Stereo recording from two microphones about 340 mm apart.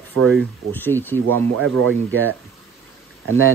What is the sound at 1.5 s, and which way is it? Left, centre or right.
Speech, right.